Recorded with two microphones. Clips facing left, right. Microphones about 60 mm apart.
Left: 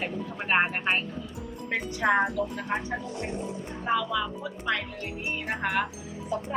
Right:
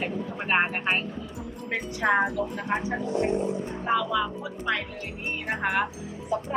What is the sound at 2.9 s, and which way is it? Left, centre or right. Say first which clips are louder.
Speech: right 7 dB; right.